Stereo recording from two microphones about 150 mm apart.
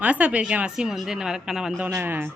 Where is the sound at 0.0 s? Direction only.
10° right (ahead or behind).